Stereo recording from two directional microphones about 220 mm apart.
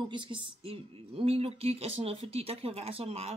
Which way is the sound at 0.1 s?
20° right (ahead or behind).